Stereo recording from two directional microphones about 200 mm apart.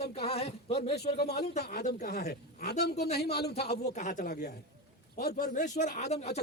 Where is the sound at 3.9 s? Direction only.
40° left (ahead or behind).